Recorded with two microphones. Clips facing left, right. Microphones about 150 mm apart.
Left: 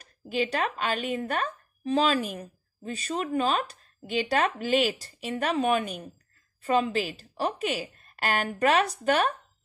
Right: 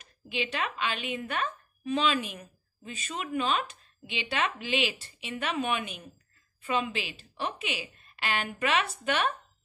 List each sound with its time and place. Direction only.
0.0 s a woman's voice: 40° left (ahead or behind)